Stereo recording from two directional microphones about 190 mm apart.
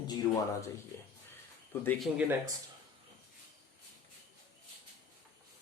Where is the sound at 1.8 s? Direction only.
10° left (ahead or behind).